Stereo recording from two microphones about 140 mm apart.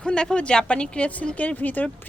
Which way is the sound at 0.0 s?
5° left (ahead or behind).